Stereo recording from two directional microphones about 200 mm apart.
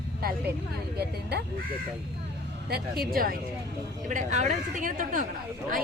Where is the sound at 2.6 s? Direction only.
50° right (ahead or behind).